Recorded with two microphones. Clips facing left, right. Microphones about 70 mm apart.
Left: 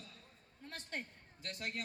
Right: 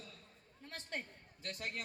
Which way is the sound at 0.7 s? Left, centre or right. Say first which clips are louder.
Even; right.